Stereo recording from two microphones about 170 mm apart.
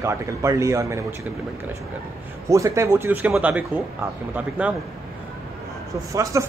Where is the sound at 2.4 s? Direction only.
20° right (ahead or behind).